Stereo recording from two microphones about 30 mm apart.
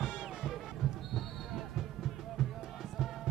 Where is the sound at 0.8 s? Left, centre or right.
Centre.